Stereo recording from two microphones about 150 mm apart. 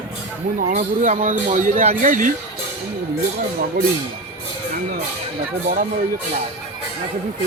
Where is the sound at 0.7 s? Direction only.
55° right (ahead or behind).